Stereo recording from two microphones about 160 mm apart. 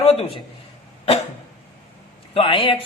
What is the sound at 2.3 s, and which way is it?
Speech, 30° left (ahead or behind).